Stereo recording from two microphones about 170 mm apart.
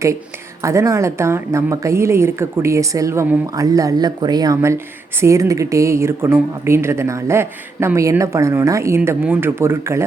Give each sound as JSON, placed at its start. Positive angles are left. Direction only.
{"t": 0.6, "sound": "a woman's voice", "side_deg": -15}